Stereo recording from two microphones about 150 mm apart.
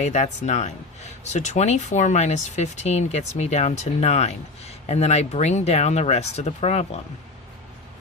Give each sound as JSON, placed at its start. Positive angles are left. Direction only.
{"t": 0.0, "sound": "speech", "side_deg": 50}